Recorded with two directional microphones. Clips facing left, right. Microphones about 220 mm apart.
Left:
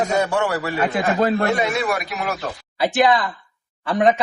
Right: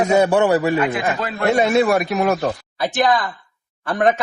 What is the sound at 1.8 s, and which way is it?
Speech, 45° right (ahead or behind).